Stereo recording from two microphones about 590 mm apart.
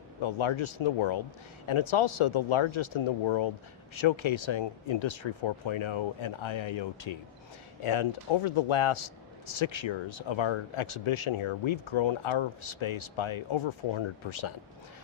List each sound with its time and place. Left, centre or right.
0.2 s speech: left